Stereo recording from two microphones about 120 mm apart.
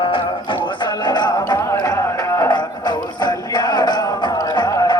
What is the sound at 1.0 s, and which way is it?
Music, 40° left (ahead or behind).